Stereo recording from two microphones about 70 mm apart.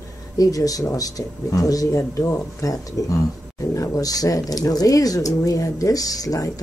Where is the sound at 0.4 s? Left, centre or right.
Left.